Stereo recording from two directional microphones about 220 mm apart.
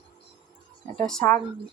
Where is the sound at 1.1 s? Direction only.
5° left (ahead or behind).